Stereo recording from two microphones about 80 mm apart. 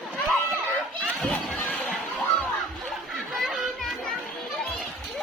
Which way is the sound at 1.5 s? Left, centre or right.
Centre.